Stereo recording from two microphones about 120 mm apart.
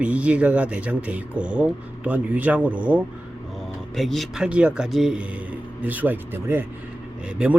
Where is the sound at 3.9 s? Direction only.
Centre (ahead or behind).